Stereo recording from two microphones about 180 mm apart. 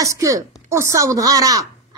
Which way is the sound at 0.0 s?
20° right (ahead or behind).